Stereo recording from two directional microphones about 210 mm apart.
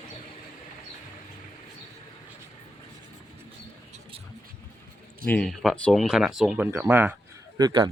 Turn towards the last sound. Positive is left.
turn(degrees=-20)  # may be behind; listen again after turning